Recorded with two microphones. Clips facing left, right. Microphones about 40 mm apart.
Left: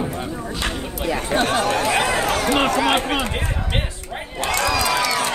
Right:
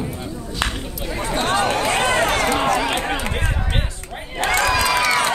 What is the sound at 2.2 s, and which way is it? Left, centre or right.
Run, right.